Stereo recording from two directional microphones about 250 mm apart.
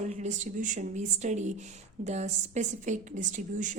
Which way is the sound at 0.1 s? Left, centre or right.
Right.